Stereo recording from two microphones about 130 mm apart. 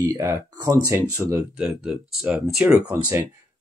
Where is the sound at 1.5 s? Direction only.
5° right (ahead or behind).